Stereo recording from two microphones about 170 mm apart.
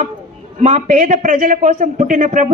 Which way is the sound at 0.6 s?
45° right (ahead or behind).